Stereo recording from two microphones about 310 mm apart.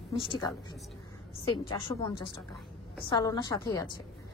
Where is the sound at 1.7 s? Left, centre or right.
Centre.